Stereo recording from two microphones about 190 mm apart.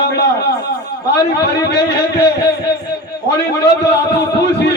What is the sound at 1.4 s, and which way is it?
Speech, 65° left (ahead or behind).